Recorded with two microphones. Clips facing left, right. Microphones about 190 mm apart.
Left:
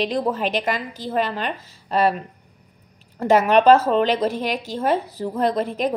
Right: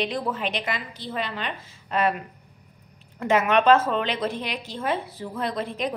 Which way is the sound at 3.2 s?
35° left (ahead or behind).